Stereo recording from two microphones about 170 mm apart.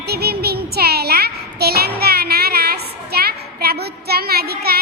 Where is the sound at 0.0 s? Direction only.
70° right (ahead or behind).